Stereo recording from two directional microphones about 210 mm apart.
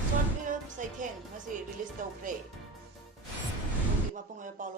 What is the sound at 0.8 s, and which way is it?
Speech, 35° right (ahead or behind).